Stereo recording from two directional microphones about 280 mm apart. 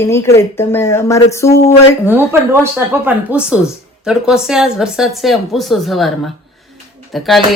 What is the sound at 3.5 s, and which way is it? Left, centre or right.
Speech, centre.